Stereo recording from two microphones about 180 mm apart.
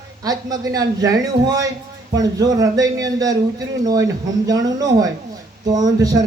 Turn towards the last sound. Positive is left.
turn(degrees=-20)  # may be behind; listen again after turning